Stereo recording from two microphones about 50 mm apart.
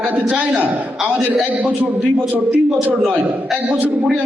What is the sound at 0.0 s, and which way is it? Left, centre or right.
Speech, right.